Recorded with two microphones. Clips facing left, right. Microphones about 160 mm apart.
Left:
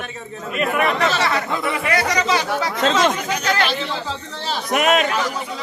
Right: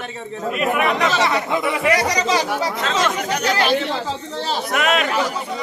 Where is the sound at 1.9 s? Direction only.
35° right (ahead or behind).